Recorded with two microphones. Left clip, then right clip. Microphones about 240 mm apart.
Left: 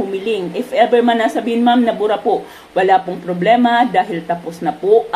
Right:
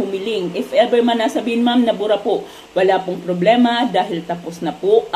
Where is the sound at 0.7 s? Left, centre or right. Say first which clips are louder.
Left 2 dB; left.